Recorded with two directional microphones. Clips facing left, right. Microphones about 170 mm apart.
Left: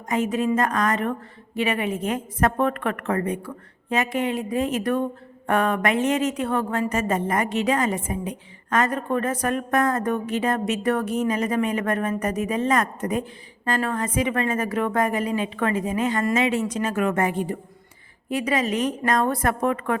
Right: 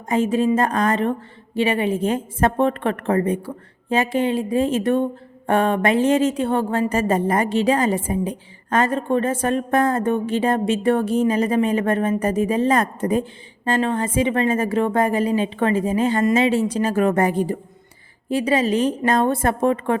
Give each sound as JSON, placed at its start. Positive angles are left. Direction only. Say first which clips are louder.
{"t": 0.1, "sound": "speech", "louder": "right 4 dB", "side_deg": -30}